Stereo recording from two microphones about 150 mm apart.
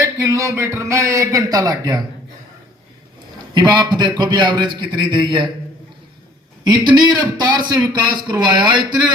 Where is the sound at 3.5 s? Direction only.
30° right (ahead or behind).